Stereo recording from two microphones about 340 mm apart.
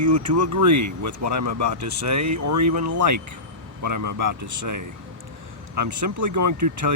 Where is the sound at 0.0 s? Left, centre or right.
Right.